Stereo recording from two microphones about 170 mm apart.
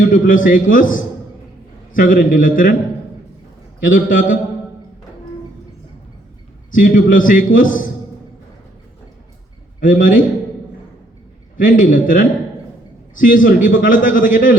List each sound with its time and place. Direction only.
0.1 s a man's voice: 50° left (ahead or behind)
3.8 s a man's voice: 50° left (ahead or behind)
6.7 s a man's voice: 50° left (ahead or behind)
9.8 s a man's voice: 50° left (ahead or behind)
11.5 s a man's voice: 50° left (ahead or behind)